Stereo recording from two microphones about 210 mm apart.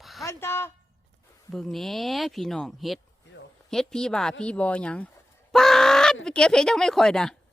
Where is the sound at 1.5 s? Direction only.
Centre (ahead or behind).